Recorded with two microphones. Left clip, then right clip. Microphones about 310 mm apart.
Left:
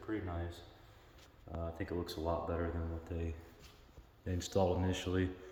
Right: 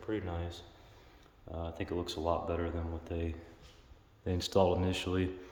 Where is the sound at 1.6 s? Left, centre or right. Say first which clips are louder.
Right 3 dB; centre.